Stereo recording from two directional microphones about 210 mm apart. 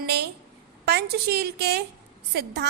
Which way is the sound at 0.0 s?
50° right (ahead or behind).